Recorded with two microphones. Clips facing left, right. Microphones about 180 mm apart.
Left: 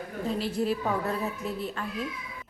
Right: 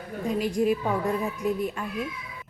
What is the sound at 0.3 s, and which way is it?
A woman's voice, 15° right (ahead or behind).